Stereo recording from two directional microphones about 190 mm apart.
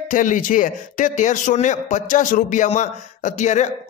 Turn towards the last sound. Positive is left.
turn(degrees=40)  # may be behind; listen again after turning